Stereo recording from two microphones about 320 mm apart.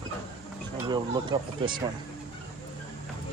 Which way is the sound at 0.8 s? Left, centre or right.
Centre.